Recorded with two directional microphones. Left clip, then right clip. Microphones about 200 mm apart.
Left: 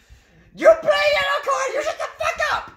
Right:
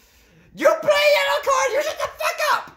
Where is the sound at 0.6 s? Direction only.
35° right (ahead or behind).